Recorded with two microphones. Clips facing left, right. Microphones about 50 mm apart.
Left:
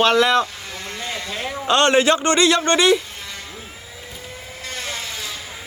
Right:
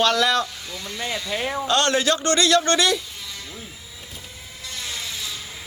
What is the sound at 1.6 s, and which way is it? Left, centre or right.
A man's voice, left.